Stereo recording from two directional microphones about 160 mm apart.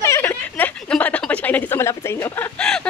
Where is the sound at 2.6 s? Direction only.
5° left (ahead or behind).